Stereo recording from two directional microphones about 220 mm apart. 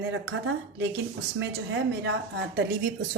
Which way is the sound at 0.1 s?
60° right (ahead or behind).